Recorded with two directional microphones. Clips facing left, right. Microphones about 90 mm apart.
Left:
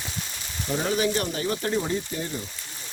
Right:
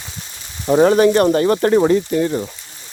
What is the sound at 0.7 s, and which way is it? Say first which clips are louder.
Speech: right 13 dB; 75° right (ahead or behind).